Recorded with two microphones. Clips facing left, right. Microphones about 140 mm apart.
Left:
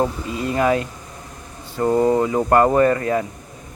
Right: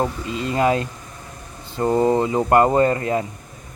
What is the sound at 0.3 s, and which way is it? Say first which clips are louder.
Speech: right 2 dB; 25° right (ahead or behind).